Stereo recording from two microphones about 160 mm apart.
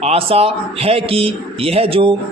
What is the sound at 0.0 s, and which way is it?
A man's voice, 40° right (ahead or behind).